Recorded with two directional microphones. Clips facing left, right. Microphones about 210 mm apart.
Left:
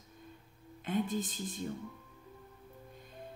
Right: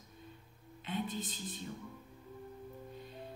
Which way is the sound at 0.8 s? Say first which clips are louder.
Left 5 dB; 45° left (ahead or behind).